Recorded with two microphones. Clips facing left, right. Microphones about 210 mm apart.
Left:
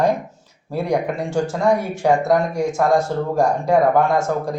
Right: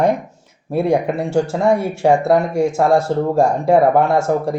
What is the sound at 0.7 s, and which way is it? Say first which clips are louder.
Speech: right 4 dB; 25° right (ahead or behind).